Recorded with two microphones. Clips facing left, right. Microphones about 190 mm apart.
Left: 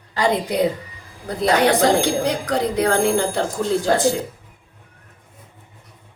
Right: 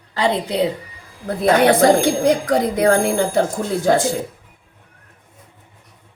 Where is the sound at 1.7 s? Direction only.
50° right (ahead or behind).